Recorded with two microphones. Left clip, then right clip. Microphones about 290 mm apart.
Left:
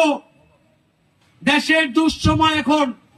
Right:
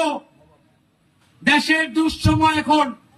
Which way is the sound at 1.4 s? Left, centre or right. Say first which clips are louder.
Left 1 dB; left.